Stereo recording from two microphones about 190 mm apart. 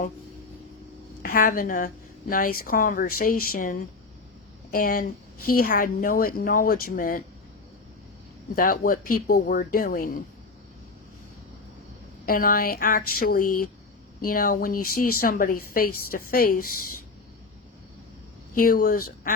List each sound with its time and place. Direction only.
1.2 s speech: 50° left (ahead or behind)
8.5 s speech: 50° left (ahead or behind)
12.2 s speech: 50° left (ahead or behind)
18.5 s speech: 50° left (ahead or behind)